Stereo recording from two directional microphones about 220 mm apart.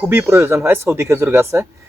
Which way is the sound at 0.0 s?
10° right (ahead or behind).